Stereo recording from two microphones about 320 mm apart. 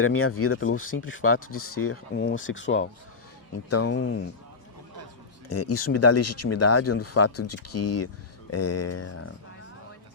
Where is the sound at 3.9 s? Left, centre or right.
Left.